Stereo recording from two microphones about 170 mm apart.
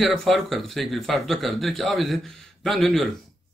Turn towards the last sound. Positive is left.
turn(degrees=0)  # may be behind; listen again after turning